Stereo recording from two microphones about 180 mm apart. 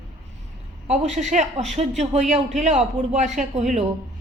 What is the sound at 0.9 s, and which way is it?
A woman's voice, 40° right (ahead or behind).